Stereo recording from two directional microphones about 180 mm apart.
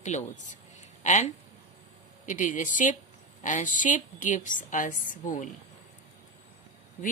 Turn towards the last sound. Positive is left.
turn(degrees=45)  # may be behind; listen again after turning